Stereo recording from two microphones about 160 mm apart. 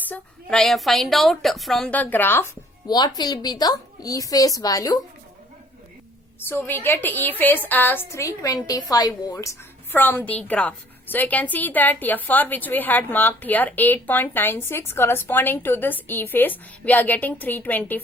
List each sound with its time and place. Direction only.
0.1 s a woman's voice: 5° left (ahead or behind)
2.8 s a woman's voice: 25° left (ahead or behind)
6.5 s a woman's voice: 15° left (ahead or behind)